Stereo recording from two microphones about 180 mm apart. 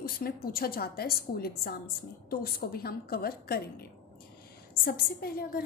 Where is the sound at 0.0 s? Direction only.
55° left (ahead or behind).